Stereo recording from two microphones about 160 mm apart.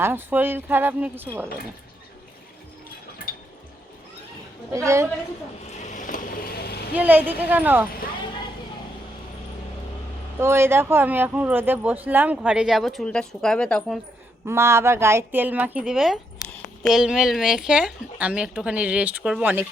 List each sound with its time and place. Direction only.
0.0 s a woman's voice: 15° right (ahead or behind)
3.2 s water: 65° left (ahead or behind)
4.7 s a woman's voice: 20° right (ahead or behind)
5.8 s vehicle: 50° left (ahead or behind); by 6.7 s 75° left (ahead or behind)
6.9 s a woman's voice: 10° right (ahead or behind)
10.4 s a woman's voice: 15° right (ahead or behind); by 14.0 s 5° left (ahead or behind)
14.4 s a woman's voice: 15° right (ahead or behind)